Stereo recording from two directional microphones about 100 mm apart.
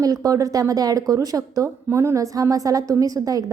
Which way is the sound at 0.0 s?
35° right (ahead or behind).